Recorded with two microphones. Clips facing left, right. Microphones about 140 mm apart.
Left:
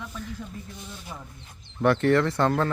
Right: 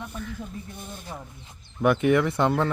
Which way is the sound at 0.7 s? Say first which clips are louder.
Right 2 dB; 50° right (ahead or behind).